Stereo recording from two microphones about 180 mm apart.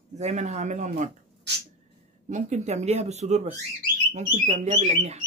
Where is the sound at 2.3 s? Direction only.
40° right (ahead or behind).